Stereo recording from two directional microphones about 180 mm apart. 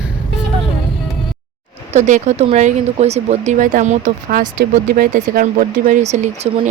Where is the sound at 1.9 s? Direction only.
40° right (ahead or behind).